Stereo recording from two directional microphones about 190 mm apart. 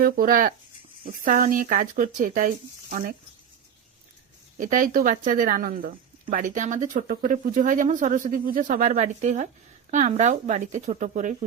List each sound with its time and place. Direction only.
0.0 s speech: 45° right (ahead or behind)
4.5 s speech: 45° right (ahead or behind)